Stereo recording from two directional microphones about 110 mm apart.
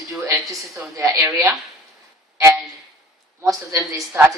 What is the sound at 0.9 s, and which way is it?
Speech, 25° right (ahead or behind).